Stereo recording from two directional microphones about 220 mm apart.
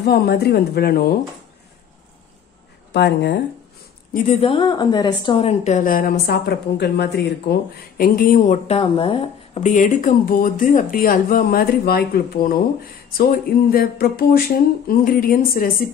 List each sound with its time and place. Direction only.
0.0 s a woman's voice: 45° left (ahead or behind)
2.9 s a woman's voice: 50° left (ahead or behind)
4.1 s a woman's voice: 30° left (ahead or behind)